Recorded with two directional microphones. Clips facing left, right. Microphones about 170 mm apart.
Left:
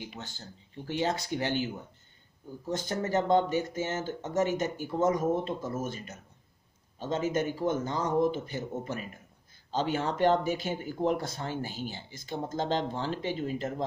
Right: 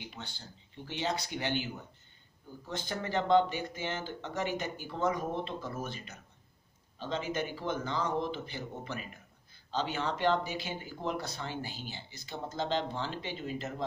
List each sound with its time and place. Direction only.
0.8 s speech: 45° left (ahead or behind)
2.7 s speech: 40° left (ahead or behind)